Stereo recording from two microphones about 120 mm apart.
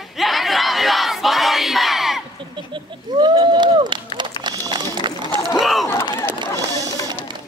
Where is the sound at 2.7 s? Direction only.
40° right (ahead or behind).